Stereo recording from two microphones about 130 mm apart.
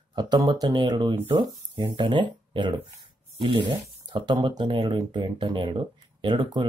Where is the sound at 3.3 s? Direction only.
40° right (ahead or behind).